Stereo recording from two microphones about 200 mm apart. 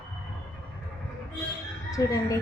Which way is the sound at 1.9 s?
15° left (ahead or behind).